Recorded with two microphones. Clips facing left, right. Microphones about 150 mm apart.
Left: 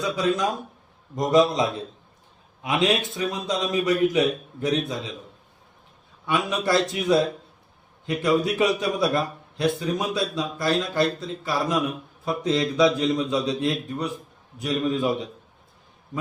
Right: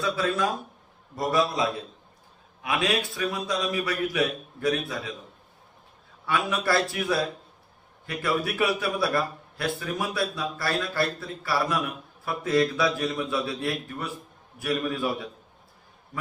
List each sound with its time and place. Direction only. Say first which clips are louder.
0.0 s a man's voice: left 2 dB; 15° left (ahead or behind)
6.2 s a man's voice: left 2 dB; 20° left (ahead or behind)